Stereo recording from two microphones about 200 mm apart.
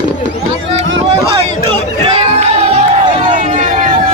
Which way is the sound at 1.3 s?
20° right (ahead or behind).